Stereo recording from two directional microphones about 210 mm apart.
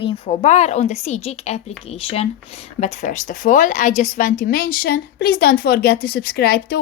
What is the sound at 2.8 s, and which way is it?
A woman's voice, 35° left (ahead or behind).